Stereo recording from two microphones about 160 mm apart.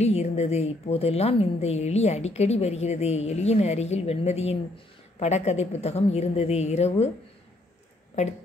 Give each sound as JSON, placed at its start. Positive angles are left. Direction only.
{"t": 0.0, "sound": "a woman's voice", "side_deg": 40}
{"t": 8.2, "sound": "a woman's voice", "side_deg": 45}